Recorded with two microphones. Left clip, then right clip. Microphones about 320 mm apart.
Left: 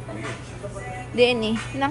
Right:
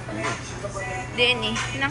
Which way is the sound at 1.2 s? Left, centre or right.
Centre.